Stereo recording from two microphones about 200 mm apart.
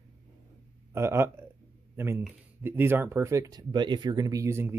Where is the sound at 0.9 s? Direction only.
15° right (ahead or behind).